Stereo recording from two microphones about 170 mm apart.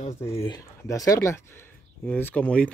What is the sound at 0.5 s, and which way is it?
Speech, 20° left (ahead or behind).